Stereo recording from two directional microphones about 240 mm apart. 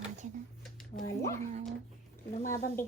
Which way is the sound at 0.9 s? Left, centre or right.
Left.